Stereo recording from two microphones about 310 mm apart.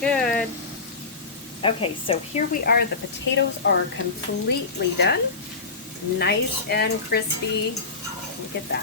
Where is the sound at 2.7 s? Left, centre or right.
Left.